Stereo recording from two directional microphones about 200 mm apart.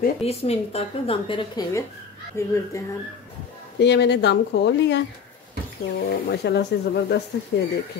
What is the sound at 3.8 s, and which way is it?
Speech, 60° left (ahead or behind).